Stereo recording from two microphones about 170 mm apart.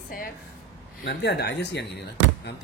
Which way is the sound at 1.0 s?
80° left.